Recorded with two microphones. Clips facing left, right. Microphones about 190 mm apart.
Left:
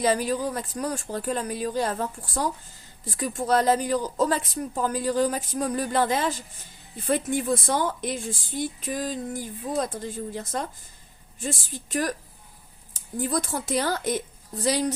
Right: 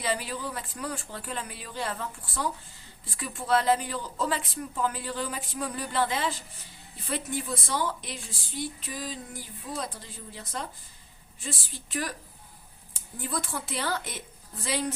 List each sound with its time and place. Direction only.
0.0 s a woman's voice: 45° left (ahead or behind)